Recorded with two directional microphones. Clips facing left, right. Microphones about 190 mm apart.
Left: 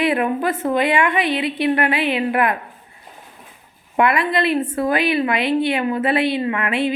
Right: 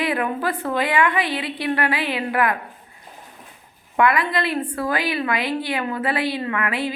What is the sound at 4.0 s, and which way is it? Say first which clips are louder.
A woman's voice: left 2 dB; 25° left (ahead or behind).